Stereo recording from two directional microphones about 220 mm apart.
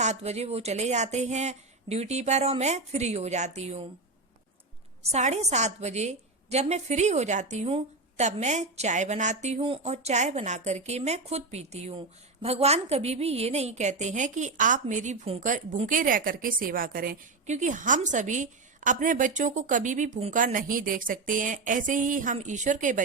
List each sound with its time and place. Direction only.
0.0 s a woman's voice: 30° right (ahead or behind)
5.0 s a woman's voice: 30° right (ahead or behind)